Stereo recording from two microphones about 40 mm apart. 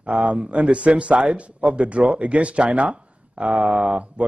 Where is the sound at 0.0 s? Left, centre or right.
Right.